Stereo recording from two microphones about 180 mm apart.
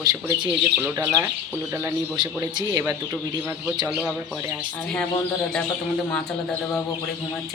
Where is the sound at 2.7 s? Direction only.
15° right (ahead or behind).